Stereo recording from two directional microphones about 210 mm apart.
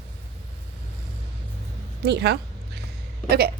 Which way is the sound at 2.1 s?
55° right (ahead or behind).